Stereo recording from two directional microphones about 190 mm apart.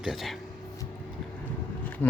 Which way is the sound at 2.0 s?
10° left (ahead or behind).